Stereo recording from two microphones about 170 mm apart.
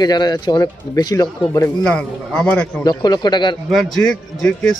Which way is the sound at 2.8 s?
25° left (ahead or behind).